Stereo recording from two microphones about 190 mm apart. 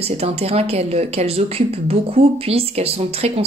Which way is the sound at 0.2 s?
30° right (ahead or behind).